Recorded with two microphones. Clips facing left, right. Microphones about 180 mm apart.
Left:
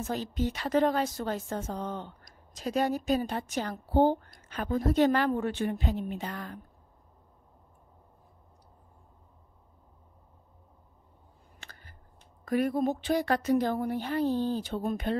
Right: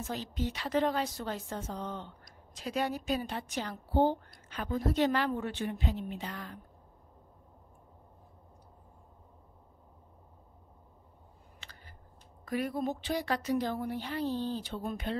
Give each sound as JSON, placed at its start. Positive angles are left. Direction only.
{"t": 0.0, "sound": "a woman's voice", "side_deg": 50}
{"t": 12.4, "sound": "a woman's voice", "side_deg": 50}